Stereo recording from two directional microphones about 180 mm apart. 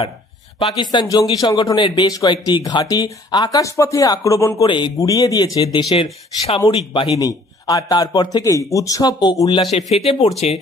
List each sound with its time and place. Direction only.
0.6 s speech: 25° left (ahead or behind)